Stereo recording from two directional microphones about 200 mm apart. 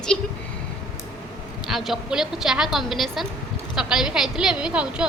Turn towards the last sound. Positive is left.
turn(degrees=-5)  # may be behind; listen again after turning